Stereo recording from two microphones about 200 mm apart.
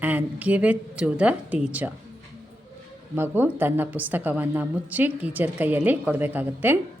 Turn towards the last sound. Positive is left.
turn(degrees=-10)  # may be behind; listen again after turning